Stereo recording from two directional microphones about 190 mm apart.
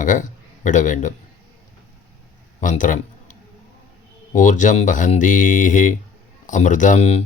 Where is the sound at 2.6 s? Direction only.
45° left (ahead or behind).